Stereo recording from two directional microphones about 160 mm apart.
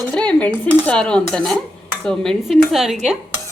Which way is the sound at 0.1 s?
5° left (ahead or behind).